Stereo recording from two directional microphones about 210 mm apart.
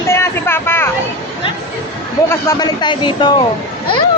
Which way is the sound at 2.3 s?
15° left (ahead or behind).